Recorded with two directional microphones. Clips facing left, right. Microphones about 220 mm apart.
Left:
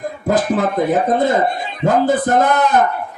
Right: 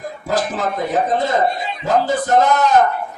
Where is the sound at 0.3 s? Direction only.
55° left (ahead or behind).